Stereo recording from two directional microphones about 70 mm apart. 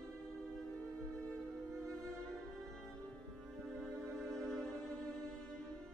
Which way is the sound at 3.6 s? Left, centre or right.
Centre.